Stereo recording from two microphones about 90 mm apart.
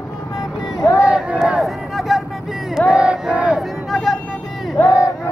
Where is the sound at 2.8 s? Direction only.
10° right (ahead or behind).